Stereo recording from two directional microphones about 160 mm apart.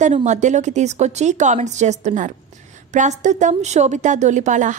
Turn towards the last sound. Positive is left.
turn(degrees=-50)  # may be behind; listen again after turning